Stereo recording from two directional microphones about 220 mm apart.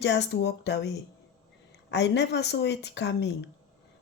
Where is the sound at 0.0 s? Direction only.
50° left (ahead or behind).